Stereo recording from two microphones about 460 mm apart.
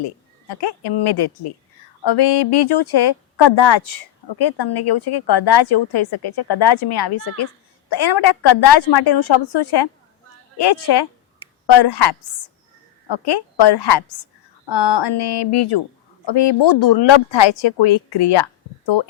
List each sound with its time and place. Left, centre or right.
0.0 s a woman's voice: left